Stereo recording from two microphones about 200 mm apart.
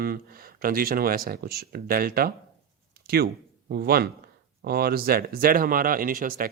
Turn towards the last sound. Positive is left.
turn(degrees=-45)  # may be behind; listen again after turning